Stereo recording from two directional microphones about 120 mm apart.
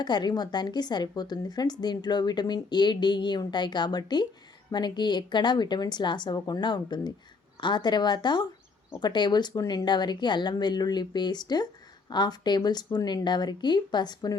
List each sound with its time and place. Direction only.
0.0 s speech: 35° left (ahead or behind)